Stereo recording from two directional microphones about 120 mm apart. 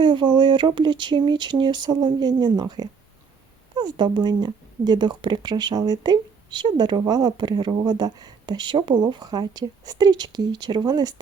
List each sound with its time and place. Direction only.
0.0 s speech: 40° right (ahead or behind)